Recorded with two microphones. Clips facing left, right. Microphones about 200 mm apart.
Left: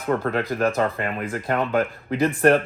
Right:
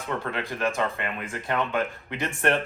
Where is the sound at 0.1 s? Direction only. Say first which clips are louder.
Left 8 dB; 40° left (ahead or behind).